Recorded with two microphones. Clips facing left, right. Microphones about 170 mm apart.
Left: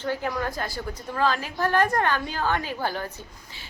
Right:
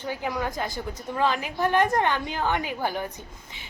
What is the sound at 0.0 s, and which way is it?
A woman's voice, 15° right (ahead or behind).